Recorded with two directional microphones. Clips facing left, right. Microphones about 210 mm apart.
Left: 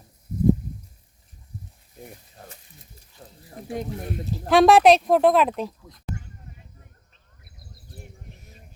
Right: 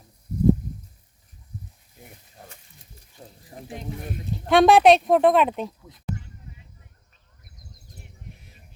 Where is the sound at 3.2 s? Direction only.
25° right (ahead or behind).